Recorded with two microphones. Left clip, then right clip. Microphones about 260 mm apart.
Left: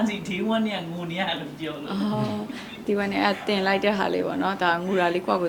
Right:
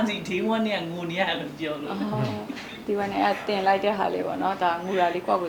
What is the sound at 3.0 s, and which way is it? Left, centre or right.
A woman's voice, left.